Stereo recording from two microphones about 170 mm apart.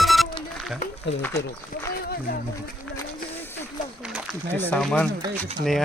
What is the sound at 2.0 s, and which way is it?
Speech, 65° left (ahead or behind).